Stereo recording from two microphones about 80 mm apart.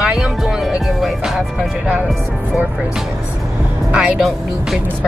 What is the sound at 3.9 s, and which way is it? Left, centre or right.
Speech, centre.